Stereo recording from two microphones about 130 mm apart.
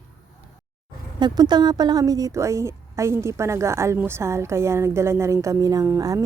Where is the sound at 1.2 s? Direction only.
35° right (ahead or behind).